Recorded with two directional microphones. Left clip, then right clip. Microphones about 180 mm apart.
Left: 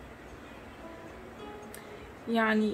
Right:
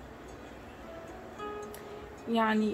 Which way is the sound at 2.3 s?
20° left (ahead or behind).